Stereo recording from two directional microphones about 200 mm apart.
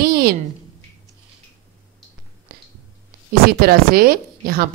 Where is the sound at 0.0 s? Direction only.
50° right (ahead or behind).